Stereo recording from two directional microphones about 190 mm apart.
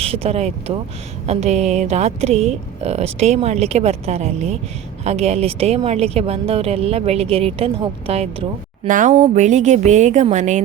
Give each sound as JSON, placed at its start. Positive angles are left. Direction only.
{"t": 0.0, "sound": "a woman's voice", "side_deg": -30}
{"t": 8.9, "sound": "a woman's voice", "side_deg": -40}